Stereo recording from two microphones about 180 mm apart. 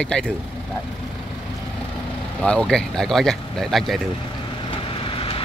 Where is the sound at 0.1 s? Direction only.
5° left (ahead or behind).